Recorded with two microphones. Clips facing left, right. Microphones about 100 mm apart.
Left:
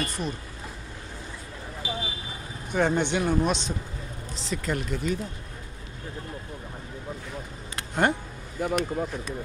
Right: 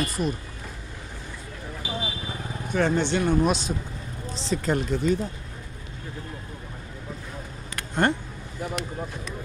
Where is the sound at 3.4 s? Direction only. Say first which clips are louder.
Right 3 dB; 5° right (ahead or behind).